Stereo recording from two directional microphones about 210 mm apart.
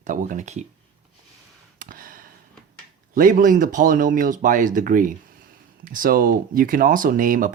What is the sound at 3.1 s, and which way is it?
Speech, 40° right (ahead or behind).